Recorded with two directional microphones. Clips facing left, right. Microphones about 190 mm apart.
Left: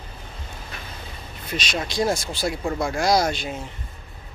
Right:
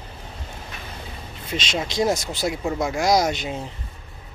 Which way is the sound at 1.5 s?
25° right (ahead or behind).